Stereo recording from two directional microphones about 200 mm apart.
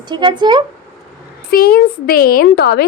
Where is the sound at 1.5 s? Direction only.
50° left (ahead or behind).